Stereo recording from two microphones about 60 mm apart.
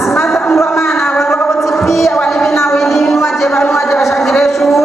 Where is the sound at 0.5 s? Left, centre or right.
Left.